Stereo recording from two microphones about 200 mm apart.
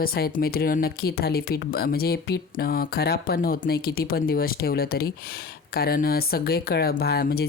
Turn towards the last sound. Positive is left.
turn(degrees=50)  # may be behind; listen again after turning